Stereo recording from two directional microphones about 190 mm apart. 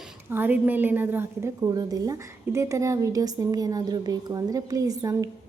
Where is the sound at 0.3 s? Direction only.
10° right (ahead or behind).